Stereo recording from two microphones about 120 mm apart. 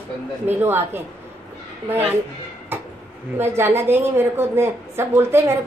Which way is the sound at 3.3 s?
20° right (ahead or behind).